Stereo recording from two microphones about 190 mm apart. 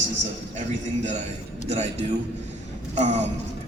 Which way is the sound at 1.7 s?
35° right (ahead or behind).